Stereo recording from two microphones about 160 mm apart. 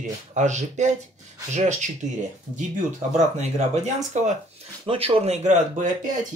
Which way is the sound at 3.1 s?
45° right (ahead or behind).